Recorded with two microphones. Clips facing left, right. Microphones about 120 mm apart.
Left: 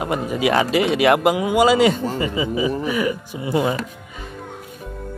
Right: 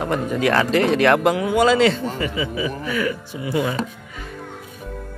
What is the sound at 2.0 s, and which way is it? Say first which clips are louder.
Speech: left 2 dB; 25° left (ahead or behind).